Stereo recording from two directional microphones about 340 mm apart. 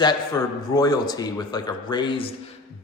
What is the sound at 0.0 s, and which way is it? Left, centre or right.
A man's voice, centre.